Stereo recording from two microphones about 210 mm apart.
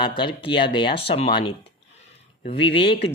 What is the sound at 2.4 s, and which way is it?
Speech, 25° left (ahead or behind).